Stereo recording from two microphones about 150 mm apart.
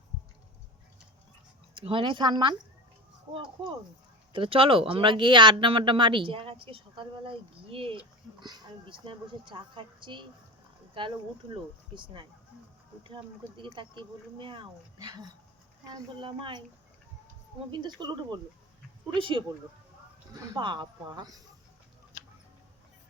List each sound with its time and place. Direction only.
1.7 s speech: 35° right (ahead or behind)
17.7 s speech: 30° right (ahead or behind)